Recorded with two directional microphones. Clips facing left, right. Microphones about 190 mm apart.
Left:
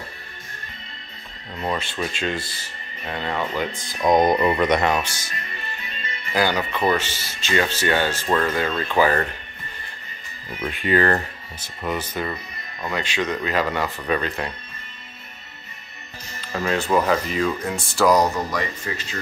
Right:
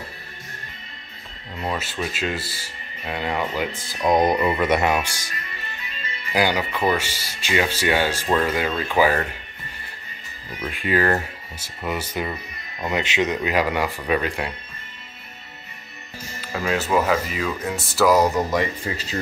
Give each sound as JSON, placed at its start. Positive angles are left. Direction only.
{"t": 1.6, "sound": "speech", "side_deg": -5}
{"t": 6.3, "sound": "speech", "side_deg": -10}
{"t": 10.8, "sound": "speech", "side_deg": -5}
{"t": 16.3, "sound": "speech", "side_deg": -5}
{"t": 18.5, "sound": "speech", "side_deg": -25}